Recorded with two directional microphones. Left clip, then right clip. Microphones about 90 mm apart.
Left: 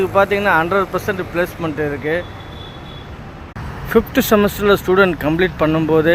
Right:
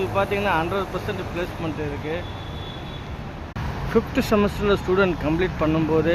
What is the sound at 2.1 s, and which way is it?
Speech, 50° left (ahead or behind).